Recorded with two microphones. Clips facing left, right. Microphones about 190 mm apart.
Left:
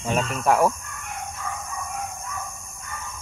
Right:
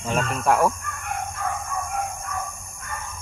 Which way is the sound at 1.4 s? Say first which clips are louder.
Right 5 dB; 55° right (ahead or behind).